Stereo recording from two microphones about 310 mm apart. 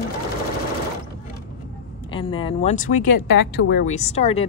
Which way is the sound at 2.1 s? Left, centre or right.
Centre.